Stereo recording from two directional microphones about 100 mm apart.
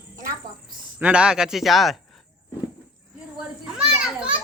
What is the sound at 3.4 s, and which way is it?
Children playing, 10° right (ahead or behind).